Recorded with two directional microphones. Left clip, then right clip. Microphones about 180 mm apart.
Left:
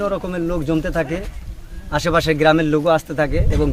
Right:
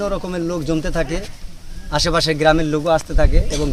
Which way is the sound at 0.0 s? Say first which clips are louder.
Left 1 dB; centre (ahead or behind).